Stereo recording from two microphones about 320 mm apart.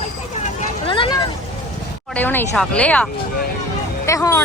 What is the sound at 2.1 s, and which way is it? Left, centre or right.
Speech, centre.